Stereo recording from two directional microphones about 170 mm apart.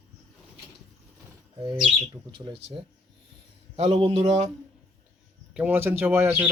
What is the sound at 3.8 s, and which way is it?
Speech, 35° right (ahead or behind).